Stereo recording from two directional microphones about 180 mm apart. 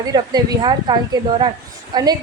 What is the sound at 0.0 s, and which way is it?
A woman's voice, 20° right (ahead or behind).